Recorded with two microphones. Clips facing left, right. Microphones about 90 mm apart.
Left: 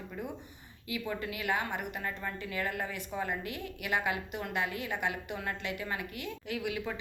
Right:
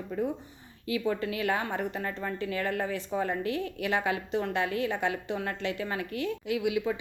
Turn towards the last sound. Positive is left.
turn(degrees=-20)  # may be behind; listen again after turning